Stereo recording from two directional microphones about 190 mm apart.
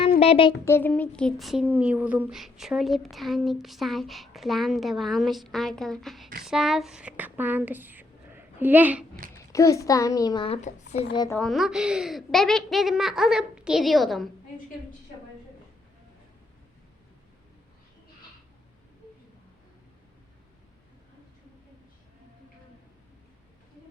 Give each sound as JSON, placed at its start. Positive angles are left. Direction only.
{"t": 0.2, "sound": "speech", "side_deg": 30}
{"t": 0.6, "sound": "speech", "side_deg": 10}
{"t": 9.3, "sound": "speech", "side_deg": 15}
{"t": 11.1, "sound": "speech", "side_deg": 20}
{"t": 11.3, "sound": "speech", "side_deg": 0}